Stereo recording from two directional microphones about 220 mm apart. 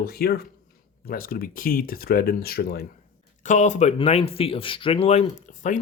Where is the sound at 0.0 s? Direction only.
45° left (ahead or behind).